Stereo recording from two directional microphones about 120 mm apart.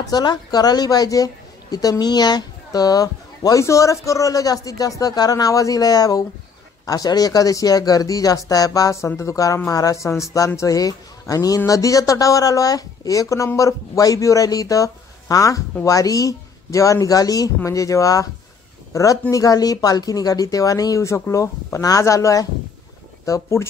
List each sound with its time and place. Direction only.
0.0 s a woman's voice: 35° left (ahead or behind)
19.3 s speech: 30° left (ahead or behind)